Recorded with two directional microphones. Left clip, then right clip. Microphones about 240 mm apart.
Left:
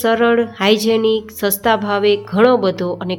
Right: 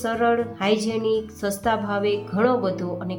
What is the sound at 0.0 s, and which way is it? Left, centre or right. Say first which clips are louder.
A woman's voice: left 8 dB; left.